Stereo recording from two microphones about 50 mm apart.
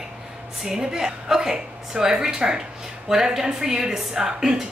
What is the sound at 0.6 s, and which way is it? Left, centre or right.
A woman's voice, centre.